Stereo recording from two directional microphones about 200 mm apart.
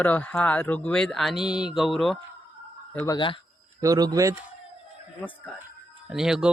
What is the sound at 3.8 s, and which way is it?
Speech, 15° right (ahead or behind).